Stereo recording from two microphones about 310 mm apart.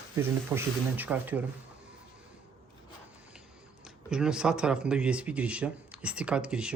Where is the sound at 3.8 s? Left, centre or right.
Centre.